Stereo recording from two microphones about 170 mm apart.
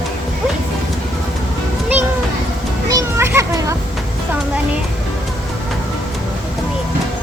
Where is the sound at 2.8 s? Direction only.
20° right (ahead or behind).